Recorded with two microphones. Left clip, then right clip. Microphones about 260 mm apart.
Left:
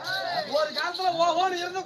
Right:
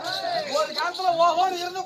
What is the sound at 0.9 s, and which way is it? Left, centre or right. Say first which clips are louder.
Speech: right 4 dB; centre.